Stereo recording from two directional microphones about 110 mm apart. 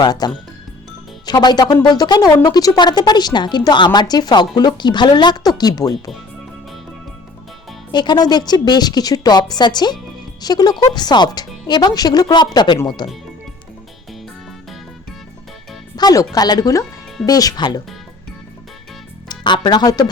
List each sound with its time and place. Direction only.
0.0 s a woman's voice: 40° left (ahead or behind)
1.3 s a woman's voice: 40° left (ahead or behind)
7.9 s a woman's voice: 40° left (ahead or behind)
16.0 s a woman's voice: 35° left (ahead or behind)
19.3 s speech: 40° left (ahead or behind)